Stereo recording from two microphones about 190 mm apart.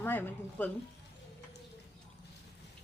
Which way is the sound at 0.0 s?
10° left (ahead or behind).